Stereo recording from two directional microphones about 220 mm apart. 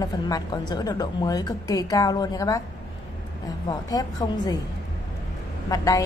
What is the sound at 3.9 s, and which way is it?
Speech, 15° left (ahead or behind).